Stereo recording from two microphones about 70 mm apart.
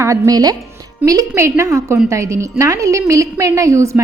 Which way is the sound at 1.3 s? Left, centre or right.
Right.